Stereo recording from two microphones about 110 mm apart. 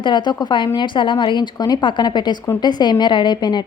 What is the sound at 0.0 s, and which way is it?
A woman's voice, 45° left (ahead or behind).